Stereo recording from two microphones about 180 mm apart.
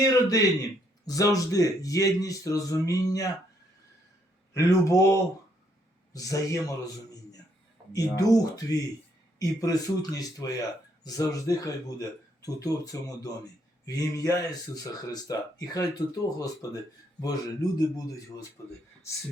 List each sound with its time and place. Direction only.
0.1 s speech: 20° left (ahead or behind)
4.5 s speech: 15° left (ahead or behind)
6.1 s a man's voice: 20° left (ahead or behind)